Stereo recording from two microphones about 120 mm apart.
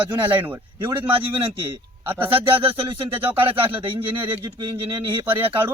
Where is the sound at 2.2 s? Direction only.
45° right (ahead or behind).